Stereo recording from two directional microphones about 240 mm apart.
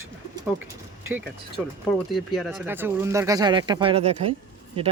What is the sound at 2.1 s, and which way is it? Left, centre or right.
Speech, centre.